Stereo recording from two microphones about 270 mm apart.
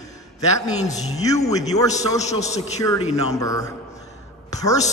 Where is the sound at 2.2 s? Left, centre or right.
Left.